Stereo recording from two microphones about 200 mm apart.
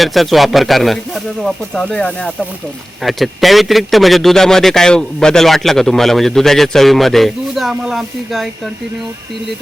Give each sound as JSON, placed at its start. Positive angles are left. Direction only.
{"t": 0.0, "sound": "speech", "side_deg": 0}